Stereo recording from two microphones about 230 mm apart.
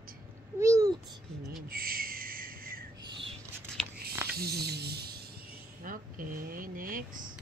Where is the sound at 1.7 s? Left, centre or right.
Right.